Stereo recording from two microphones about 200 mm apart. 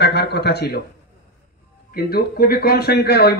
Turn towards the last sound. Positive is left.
turn(degrees=55)  # may be behind; listen again after turning